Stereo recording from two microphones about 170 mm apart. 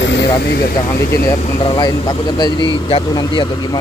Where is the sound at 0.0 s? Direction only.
90° left; by 0.7 s 70° left (ahead or behind).